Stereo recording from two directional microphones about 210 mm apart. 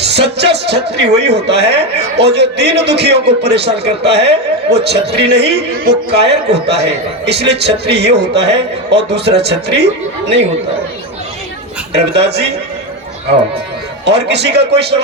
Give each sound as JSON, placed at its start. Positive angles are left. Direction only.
{"t": 0.0, "sound": "a man's voice", "side_deg": -55}
{"t": 12.1, "sound": "a man's voice", "side_deg": -55}
{"t": 14.0, "sound": "a man's voice", "side_deg": -55}